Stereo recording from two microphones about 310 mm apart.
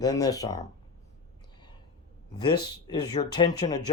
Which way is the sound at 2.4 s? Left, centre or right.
Centre.